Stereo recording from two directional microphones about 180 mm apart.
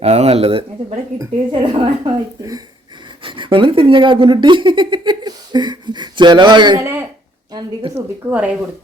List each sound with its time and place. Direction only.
0.0 s speech: 35° right (ahead or behind); by 7.0 s 15° right (ahead or behind)
7.5 s speech: 30° right (ahead or behind)
8.2 s speech: 5° right (ahead or behind)